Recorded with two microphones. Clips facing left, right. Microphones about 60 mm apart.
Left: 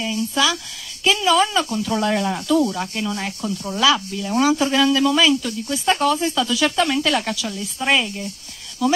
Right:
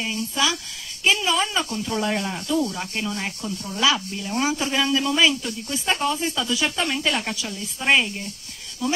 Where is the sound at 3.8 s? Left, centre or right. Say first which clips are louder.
Left 4 dB; right.